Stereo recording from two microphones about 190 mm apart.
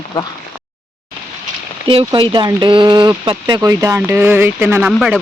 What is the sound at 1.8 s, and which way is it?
Speech, 25° right (ahead or behind).